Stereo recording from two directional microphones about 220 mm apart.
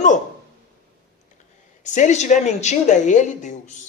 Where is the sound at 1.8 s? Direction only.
35° left (ahead or behind).